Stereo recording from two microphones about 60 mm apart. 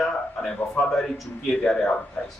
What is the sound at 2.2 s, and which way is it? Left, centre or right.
Speech, left.